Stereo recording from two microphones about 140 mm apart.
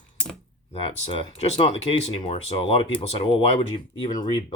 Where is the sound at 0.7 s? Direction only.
45° left (ahead or behind).